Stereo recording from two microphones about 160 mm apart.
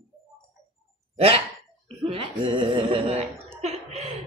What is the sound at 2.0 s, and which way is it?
Speech, 35° right (ahead or behind).